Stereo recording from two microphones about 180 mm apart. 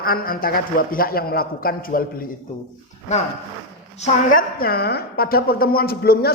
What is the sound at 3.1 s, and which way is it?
A woman's voice, 40° left (ahead or behind).